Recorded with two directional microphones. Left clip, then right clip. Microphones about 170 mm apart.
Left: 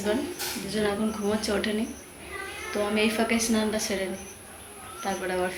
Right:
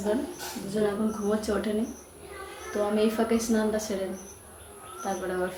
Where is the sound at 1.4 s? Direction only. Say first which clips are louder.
Left 1 dB; 15° right (ahead or behind).